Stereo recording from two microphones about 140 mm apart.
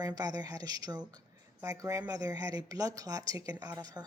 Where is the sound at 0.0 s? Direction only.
25° right (ahead or behind).